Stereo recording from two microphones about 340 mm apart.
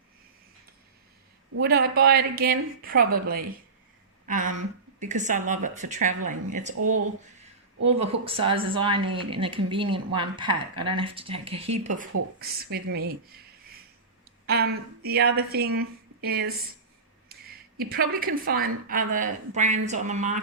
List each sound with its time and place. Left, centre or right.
1.5 s speech: right
6.7 s speech: right
7.9 s speech: centre
14.4 s a woman's voice: right